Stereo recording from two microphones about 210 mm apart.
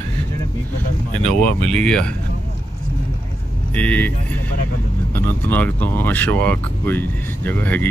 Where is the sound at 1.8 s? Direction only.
5° left (ahead or behind).